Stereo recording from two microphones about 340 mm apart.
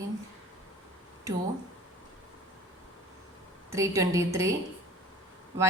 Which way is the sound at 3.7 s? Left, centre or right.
Centre.